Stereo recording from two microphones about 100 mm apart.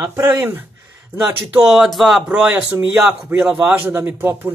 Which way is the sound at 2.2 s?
10° right (ahead or behind).